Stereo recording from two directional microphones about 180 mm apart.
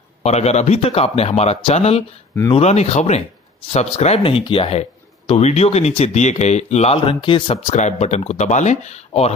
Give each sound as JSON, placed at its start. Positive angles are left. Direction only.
{"t": 0.2, "sound": "speech", "side_deg": 35}
{"t": 7.7, "sound": "speech", "side_deg": 40}